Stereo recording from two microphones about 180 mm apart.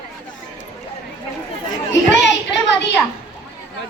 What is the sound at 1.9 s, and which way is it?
Children playing, 80° left.